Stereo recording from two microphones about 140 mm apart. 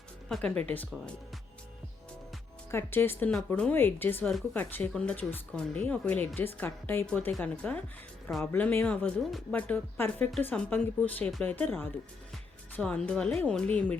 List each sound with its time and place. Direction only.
0.3 s speech: 5° left (ahead or behind)
2.7 s speech: 15° left (ahead or behind)